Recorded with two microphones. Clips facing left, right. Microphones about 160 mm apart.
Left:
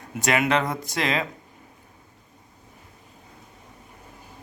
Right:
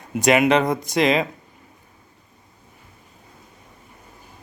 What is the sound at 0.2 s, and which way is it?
Speech, 20° right (ahead or behind).